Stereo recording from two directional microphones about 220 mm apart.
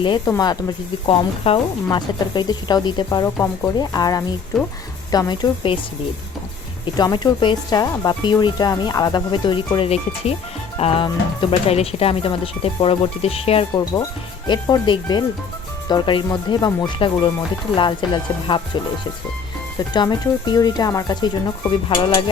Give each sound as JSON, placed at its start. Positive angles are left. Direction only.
{"t": 0.0, "sound": "speech", "side_deg": 20}
{"t": 6.8, "sound": "speech", "side_deg": 20}
{"t": 19.9, "sound": "speech", "side_deg": 20}